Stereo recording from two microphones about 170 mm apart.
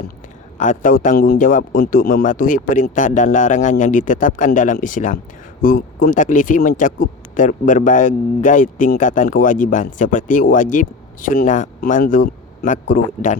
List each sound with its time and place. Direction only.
0.6 s speech: 50° left (ahead or behind)